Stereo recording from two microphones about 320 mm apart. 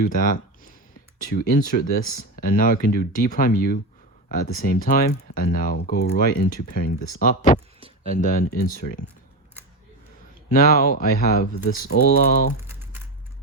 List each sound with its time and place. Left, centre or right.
0.0 s speech: left
10.5 s speech: left
12.6 s typing: centre